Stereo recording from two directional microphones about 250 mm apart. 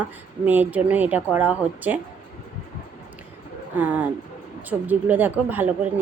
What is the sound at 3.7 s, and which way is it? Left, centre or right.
Speech, centre.